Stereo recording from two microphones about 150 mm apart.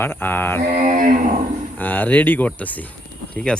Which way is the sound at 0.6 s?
55° right (ahead or behind).